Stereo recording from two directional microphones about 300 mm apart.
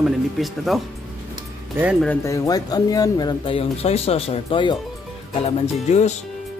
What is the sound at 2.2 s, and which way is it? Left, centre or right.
Speech, centre.